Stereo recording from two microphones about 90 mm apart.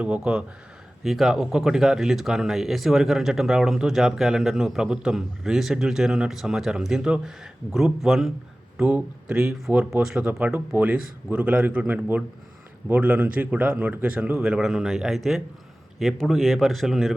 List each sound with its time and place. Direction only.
0.0 s a man's voice: 10° right (ahead or behind)
8.8 s a man's voice: 20° right (ahead or behind)
14.4 s speech: 5° right (ahead or behind)